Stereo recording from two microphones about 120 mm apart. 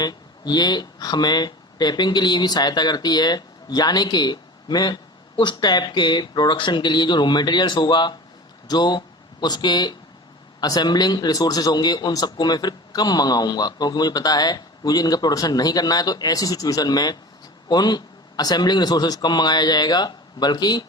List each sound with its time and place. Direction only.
0.0 s a man's voice: 35° left (ahead or behind)